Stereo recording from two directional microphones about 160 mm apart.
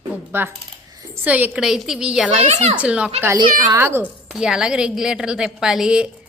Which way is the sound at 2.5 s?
45° right (ahead or behind).